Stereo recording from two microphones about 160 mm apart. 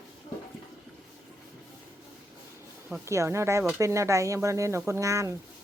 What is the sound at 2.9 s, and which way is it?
Speech, 20° right (ahead or behind).